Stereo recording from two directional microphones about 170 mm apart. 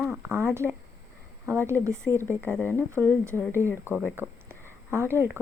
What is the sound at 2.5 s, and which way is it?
Speech, 10° left (ahead or behind).